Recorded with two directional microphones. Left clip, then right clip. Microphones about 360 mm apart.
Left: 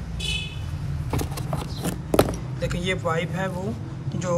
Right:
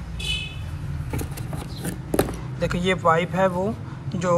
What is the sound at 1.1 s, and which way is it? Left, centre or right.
Vehicle, centre.